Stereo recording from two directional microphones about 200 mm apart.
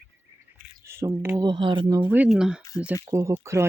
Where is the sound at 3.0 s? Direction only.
15° right (ahead or behind).